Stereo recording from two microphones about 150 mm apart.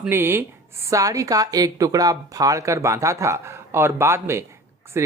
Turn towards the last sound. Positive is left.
turn(degrees=-20)  # may be behind; listen again after turning